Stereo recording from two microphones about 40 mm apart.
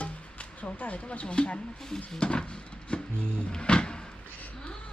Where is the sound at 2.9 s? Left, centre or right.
Left.